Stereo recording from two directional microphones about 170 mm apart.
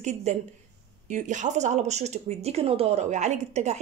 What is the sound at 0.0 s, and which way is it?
A woman's voice, 40° right (ahead or behind).